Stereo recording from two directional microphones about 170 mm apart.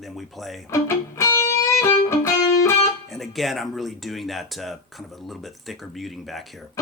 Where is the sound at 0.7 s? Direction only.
15° left (ahead or behind).